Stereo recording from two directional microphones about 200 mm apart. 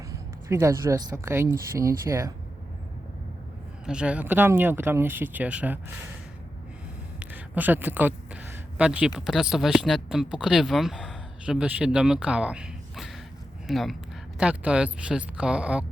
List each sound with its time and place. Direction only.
0.4 s speech: 15° right (ahead or behind)
3.8 s speech: 5° right (ahead or behind)
7.2 s speech: 10° right (ahead or behind)